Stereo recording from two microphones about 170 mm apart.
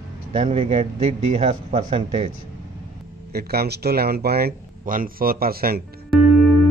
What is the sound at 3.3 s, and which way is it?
Speech, 65° right (ahead or behind).